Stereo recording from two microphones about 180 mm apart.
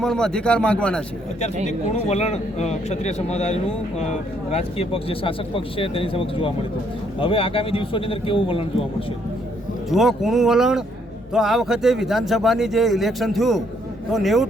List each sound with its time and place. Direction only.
0.0 s speech: 5° left (ahead or behind)
1.6 s a man's voice: 40° left (ahead or behind)
9.9 s speech: centre (ahead or behind)